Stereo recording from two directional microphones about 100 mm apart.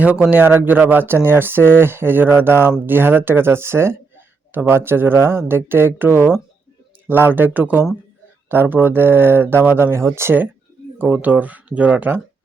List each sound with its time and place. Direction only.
0.0 s speech: 15° right (ahead or behind)